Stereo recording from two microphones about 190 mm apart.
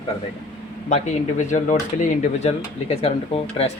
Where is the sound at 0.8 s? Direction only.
40° left (ahead or behind).